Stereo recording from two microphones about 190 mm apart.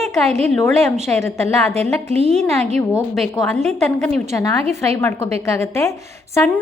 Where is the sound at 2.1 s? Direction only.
35° right (ahead or behind).